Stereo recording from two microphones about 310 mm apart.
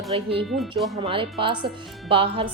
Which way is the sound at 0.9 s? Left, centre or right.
Centre.